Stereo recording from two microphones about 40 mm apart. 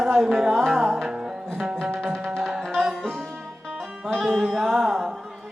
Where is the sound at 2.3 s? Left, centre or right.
Centre.